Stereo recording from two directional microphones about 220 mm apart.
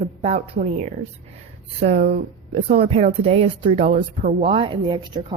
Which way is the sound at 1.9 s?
40° right (ahead or behind).